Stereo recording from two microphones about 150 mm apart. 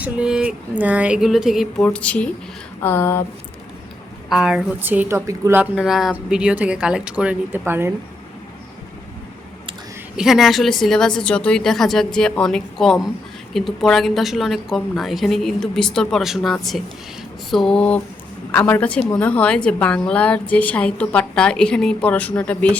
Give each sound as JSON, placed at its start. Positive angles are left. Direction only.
{"t": 0.0, "sound": "speech", "side_deg": -5}
{"t": 1.8, "sound": "a woman's voice", "side_deg": 10}
{"t": 4.3, "sound": "speech", "side_deg": -5}
{"t": 5.7, "sound": "speech", "side_deg": 0}
{"t": 10.2, "sound": "a woman's voice", "side_deg": 0}